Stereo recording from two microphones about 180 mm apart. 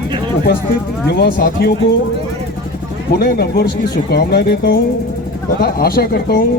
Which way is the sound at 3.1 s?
60° left (ahead or behind).